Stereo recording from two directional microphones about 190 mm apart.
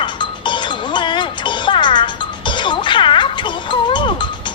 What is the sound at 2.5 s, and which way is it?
Music, 25° left (ahead or behind).